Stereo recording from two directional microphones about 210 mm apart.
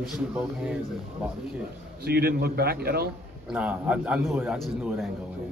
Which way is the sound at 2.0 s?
50° right (ahead or behind).